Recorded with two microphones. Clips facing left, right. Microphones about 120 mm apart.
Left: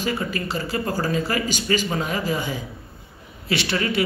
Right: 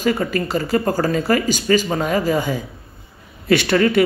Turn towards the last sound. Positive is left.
turn(degrees=-50)  # may be behind; listen again after turning